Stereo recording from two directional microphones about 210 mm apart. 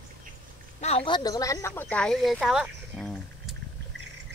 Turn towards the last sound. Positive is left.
turn(degrees=0)  # may be behind; listen again after turning